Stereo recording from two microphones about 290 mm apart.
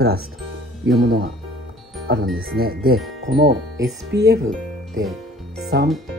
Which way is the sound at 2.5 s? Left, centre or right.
Right.